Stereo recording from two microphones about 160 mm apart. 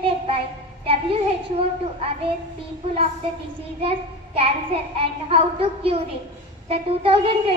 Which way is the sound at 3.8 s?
35° right (ahead or behind).